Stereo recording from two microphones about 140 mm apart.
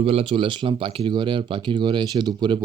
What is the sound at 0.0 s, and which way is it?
Speech, 45° right (ahead or behind).